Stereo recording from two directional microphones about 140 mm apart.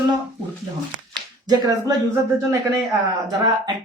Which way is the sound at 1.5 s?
25° right (ahead or behind).